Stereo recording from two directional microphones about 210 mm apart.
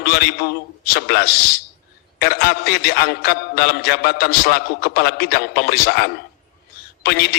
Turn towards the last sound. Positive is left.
turn(degrees=50)  # may be behind; listen again after turning